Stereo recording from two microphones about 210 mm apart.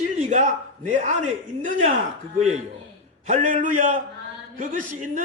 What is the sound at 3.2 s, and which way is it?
A man's voice, 35° right (ahead or behind).